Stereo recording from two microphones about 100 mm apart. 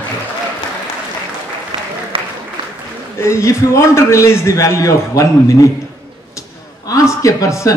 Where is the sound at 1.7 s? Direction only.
60° right (ahead or behind).